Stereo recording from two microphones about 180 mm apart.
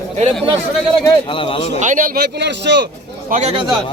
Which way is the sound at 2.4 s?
75° right (ahead or behind).